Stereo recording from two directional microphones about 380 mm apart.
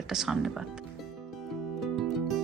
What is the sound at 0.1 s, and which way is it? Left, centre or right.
Speech, centre.